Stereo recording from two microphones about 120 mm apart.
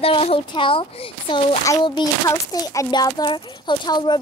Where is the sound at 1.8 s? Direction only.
35° left (ahead or behind).